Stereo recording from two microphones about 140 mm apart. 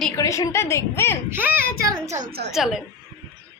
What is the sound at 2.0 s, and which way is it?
Speech, 65° right (ahead or behind).